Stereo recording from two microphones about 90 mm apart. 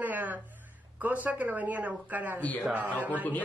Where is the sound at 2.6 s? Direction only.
15° right (ahead or behind).